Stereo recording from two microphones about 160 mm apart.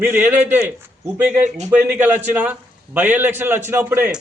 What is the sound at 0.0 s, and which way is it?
A man's voice, 10° right (ahead or behind).